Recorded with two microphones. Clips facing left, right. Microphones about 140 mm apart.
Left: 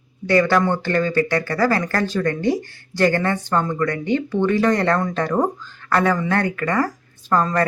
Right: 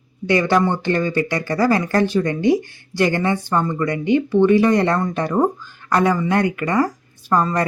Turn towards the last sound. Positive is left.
turn(degrees=-15)  # may be behind; listen again after turning